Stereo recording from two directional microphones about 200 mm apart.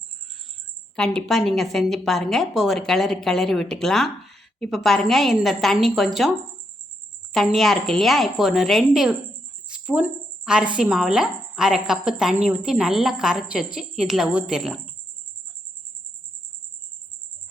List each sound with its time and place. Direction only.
0.9 s a woman's voice: 5° left (ahead or behind)
7.3 s a woman's voice: centre (ahead or behind)